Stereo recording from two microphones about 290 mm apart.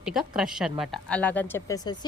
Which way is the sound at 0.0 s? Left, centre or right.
Centre.